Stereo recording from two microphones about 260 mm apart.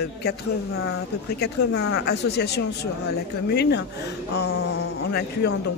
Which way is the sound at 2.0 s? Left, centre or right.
Left.